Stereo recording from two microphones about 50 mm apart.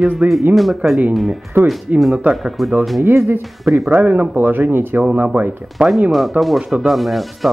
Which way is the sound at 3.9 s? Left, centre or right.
Right.